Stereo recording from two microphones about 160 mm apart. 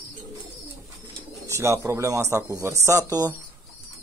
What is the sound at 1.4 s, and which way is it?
A man's voice, 15° right (ahead or behind).